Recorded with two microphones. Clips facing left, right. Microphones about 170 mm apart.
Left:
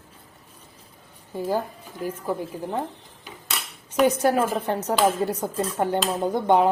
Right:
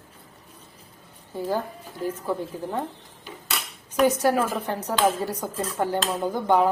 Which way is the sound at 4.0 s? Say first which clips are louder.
Left 1 dB; 20° left (ahead or behind).